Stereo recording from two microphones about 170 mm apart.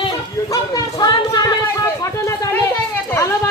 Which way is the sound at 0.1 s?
20° left (ahead or behind).